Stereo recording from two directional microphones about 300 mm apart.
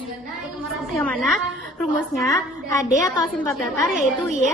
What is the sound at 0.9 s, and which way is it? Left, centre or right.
A woman's voice, centre.